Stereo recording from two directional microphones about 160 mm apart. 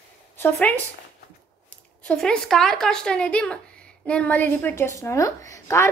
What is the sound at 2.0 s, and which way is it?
Speech, 5° left (ahead or behind).